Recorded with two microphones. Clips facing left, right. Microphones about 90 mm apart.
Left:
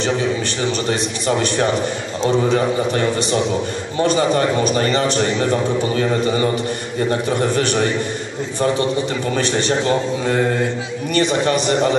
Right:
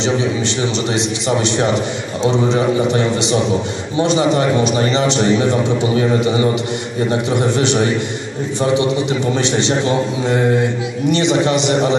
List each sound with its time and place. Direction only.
0.8 s a man's voice: 20° right (ahead or behind)